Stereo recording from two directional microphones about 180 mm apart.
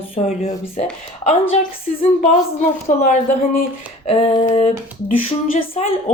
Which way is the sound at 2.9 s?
45° left (ahead or behind).